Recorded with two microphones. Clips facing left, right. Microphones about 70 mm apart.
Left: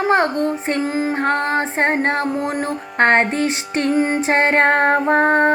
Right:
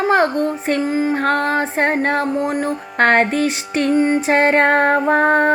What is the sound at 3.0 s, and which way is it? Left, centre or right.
Music, left.